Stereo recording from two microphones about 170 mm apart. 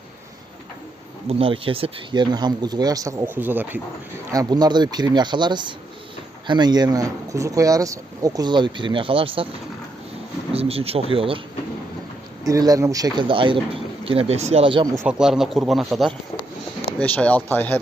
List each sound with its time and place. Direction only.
1.3 s speech: 30° right (ahead or behind); by 3.8 s 10° right (ahead or behind)
4.3 s speech: 20° right (ahead or behind)
10.5 s speech: 35° right (ahead or behind)
12.5 s speech: 20° right (ahead or behind)
14.9 s speech: 5° right (ahead or behind)